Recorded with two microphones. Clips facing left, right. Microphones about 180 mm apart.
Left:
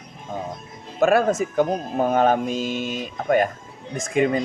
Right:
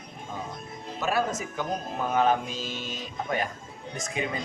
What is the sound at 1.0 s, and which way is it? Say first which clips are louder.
Speech: left 10 dB; 50° left (ahead or behind).